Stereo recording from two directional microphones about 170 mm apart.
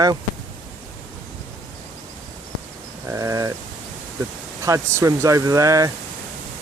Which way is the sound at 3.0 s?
20° right (ahead or behind).